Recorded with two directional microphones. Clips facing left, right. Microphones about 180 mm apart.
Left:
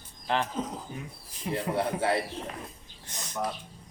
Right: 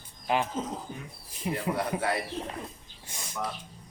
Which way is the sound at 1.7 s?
25° left (ahead or behind).